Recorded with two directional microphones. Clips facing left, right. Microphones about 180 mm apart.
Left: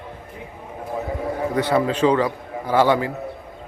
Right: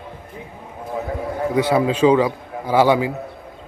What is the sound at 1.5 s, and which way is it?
A man's voice, 10° right (ahead or behind).